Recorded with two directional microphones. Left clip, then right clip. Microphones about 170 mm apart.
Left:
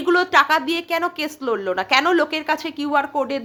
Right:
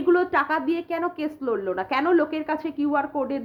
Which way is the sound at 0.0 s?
20° left (ahead or behind).